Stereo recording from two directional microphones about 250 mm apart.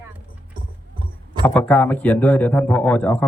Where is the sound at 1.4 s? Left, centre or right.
Centre.